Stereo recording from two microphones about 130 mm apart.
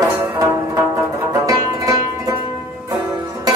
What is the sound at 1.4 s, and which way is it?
Music, 25° right (ahead or behind).